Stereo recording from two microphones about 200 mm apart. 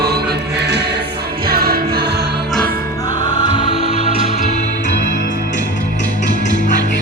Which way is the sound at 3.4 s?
25° left (ahead or behind).